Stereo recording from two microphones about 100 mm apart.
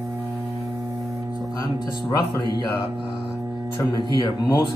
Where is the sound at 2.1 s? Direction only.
45° left (ahead or behind).